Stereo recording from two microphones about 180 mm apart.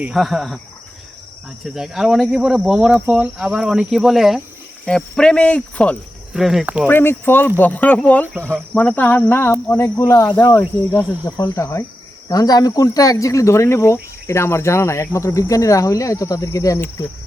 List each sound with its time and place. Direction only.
0.0 s speech: centre (ahead or behind)
1.6 s speech: 5° right (ahead or behind)
6.8 s speech: 10° left (ahead or behind)